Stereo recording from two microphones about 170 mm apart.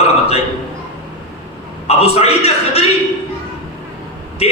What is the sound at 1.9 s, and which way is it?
Speech, 35° left (ahead or behind).